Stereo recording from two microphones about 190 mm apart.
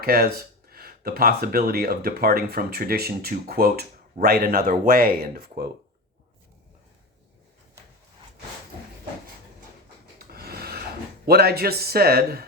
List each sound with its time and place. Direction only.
0.0 s speech: 55° right (ahead or behind)
10.2 s a sound: 55° right (ahead or behind)
11.3 s a man's voice: 55° right (ahead or behind)